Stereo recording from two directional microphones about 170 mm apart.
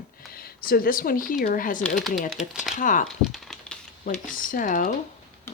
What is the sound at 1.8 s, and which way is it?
Speech, centre (ahead or behind).